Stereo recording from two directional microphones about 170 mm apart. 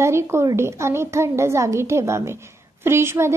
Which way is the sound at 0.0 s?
15° right (ahead or behind).